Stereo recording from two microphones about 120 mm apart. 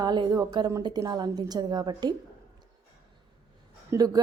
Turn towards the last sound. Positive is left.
turn(degrees=-35)  # may be behind; listen again after turning